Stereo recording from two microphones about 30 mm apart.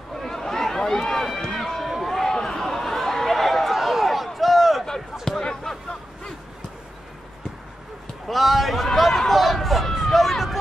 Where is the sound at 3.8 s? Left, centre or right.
Centre.